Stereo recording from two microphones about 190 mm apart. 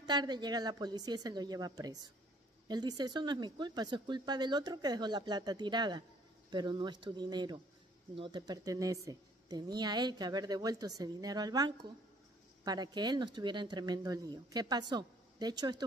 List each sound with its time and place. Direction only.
0.0 s speech: 20° right (ahead or behind)